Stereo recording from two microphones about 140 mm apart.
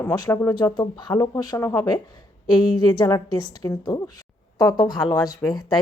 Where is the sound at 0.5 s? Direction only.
30° left (ahead or behind).